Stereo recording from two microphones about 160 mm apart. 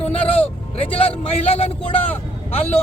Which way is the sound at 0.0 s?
40° left (ahead or behind).